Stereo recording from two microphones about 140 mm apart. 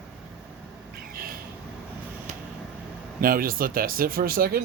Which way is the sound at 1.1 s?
90° right.